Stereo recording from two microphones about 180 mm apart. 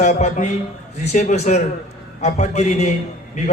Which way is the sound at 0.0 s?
40° left (ahead or behind).